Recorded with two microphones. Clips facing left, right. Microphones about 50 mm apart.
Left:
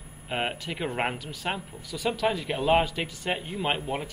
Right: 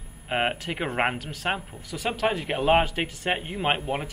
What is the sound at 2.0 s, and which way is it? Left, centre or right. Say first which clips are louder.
Speech: right 1 dB; right.